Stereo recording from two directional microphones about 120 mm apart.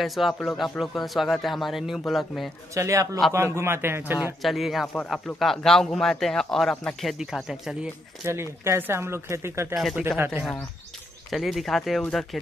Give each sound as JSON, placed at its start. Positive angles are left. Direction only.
{"t": 0.0, "sound": "a man's voice", "side_deg": 0}
{"t": 2.7, "sound": "speech", "side_deg": -25}
{"t": 4.4, "sound": "a man's voice", "side_deg": 0}
{"t": 8.3, "sound": "speech", "side_deg": -20}
{"t": 9.8, "sound": "a man's voice", "side_deg": 0}
{"t": 10.1, "sound": "speech", "side_deg": -20}
{"t": 11.2, "sound": "a man's voice", "side_deg": 0}